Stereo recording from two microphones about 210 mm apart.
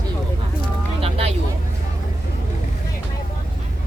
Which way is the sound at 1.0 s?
30° right (ahead or behind).